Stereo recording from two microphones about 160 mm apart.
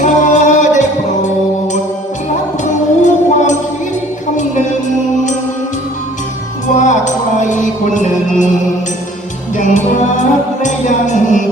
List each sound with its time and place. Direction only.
0.0 s music: 50° left (ahead or behind)
2.6 s music: 50° left (ahead or behind)
6.7 s music: 50° left (ahead or behind)